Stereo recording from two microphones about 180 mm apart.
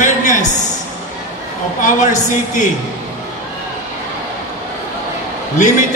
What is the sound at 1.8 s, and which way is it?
Speech, 45° left (ahead or behind).